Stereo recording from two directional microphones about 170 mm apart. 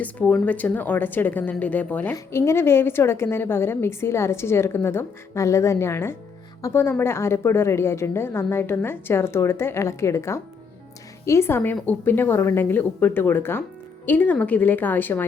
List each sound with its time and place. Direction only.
0.0 s a woman's voice: 10° left (ahead or behind)